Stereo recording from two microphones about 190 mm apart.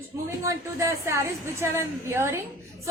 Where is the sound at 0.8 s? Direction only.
15° right (ahead or behind).